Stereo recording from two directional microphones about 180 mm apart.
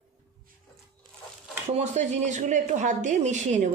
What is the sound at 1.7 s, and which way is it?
A woman's voice, 40° right (ahead or behind).